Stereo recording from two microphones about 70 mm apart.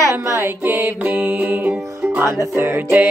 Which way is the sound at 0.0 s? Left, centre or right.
Right.